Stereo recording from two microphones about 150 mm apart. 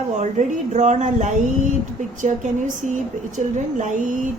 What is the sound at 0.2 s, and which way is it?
A woman's voice, 55° right (ahead or behind).